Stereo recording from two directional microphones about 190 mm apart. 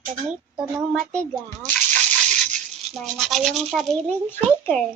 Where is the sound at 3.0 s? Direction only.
Centre (ahead or behind).